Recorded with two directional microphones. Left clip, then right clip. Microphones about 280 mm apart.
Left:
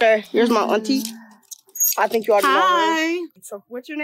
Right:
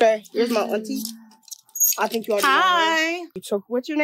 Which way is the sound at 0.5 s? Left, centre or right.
Left.